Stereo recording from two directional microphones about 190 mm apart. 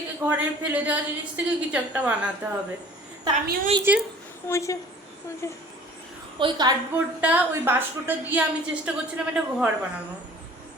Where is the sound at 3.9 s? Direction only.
10° right (ahead or behind).